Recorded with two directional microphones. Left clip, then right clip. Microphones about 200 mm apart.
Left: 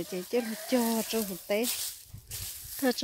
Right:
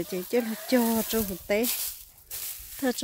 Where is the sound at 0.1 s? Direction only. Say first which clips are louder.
Right 3 dB; 15° right (ahead or behind).